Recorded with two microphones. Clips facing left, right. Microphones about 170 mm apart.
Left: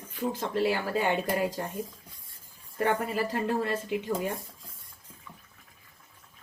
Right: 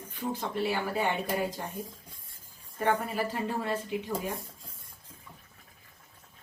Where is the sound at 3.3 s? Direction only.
75° left (ahead or behind).